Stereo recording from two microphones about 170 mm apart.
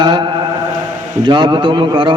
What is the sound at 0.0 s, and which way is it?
Mantra, 25° right (ahead or behind).